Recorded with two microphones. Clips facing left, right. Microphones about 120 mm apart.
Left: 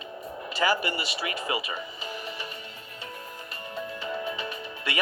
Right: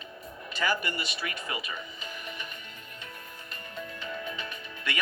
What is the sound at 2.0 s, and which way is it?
Music, 30° left (ahead or behind).